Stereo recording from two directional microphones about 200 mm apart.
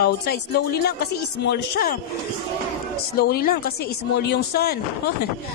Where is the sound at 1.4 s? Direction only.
55° left (ahead or behind).